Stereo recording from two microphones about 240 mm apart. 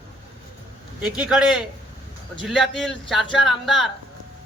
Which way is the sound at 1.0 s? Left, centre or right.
Centre.